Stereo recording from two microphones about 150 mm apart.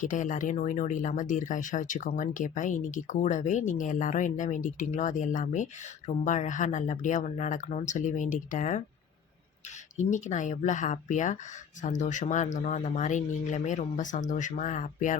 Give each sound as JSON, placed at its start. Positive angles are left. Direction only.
{"t": 0.0, "sound": "speech", "side_deg": 60}
{"t": 10.0, "sound": "speech", "side_deg": 55}